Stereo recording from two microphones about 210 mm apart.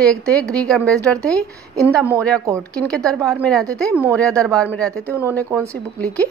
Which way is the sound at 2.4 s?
15° right (ahead or behind).